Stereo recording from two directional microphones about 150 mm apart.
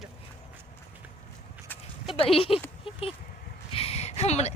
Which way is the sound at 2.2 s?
40° left (ahead or behind).